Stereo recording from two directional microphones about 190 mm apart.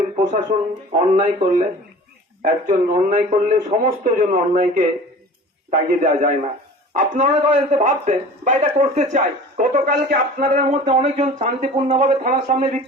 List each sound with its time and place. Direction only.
0.2 s a man's voice: 40° right (ahead or behind)